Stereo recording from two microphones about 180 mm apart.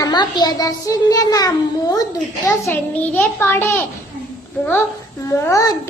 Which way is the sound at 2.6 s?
10° left (ahead or behind).